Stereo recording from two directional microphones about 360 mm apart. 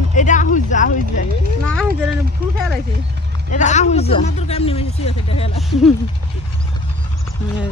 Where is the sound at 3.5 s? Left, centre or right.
Centre.